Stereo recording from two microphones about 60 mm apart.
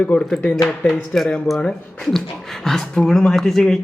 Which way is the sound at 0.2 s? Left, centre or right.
Centre.